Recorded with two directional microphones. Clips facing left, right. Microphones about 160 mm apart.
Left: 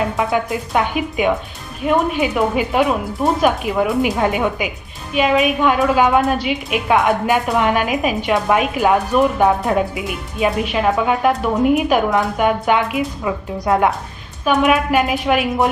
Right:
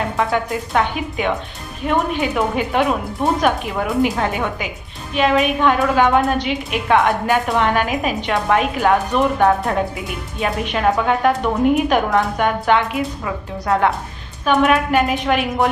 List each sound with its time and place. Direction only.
0.3 s a woman's voice: 5° left (ahead or behind)
14.4 s a woman's voice: 5° left (ahead or behind)